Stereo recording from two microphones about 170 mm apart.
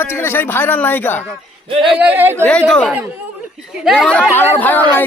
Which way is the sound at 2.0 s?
10° right (ahead or behind).